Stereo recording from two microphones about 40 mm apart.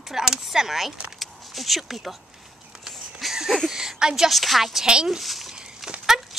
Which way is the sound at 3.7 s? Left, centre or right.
Centre.